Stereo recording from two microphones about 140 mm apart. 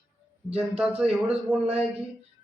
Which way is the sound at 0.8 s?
5° right (ahead or behind).